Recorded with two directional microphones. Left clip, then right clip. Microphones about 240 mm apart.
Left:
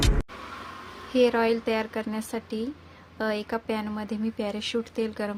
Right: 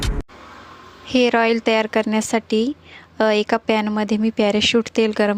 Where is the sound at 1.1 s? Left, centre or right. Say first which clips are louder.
Right 6 dB; right.